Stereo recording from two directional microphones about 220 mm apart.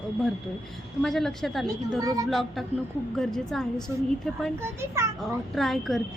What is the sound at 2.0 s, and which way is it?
Speech, 15° right (ahead or behind).